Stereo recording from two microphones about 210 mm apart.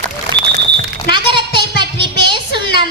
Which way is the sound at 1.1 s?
20° right (ahead or behind).